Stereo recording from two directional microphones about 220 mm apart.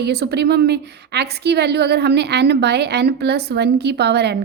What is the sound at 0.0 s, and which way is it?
A woman's voice, 50° right (ahead or behind).